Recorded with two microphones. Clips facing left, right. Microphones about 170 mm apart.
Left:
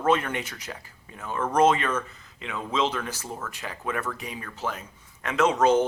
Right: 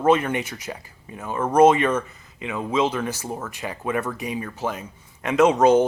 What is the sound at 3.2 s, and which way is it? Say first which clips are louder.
Speech: right 5 dB; 25° right (ahead or behind).